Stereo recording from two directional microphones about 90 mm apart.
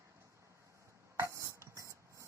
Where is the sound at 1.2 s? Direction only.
30° right (ahead or behind).